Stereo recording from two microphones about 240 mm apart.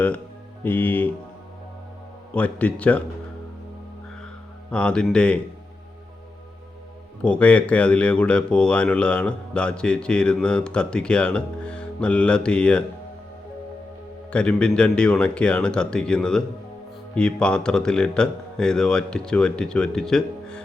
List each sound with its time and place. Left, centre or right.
0.6 s speech: centre
2.3 s speech: centre
4.7 s speech: centre
7.2 s speech: centre
14.3 s speech: centre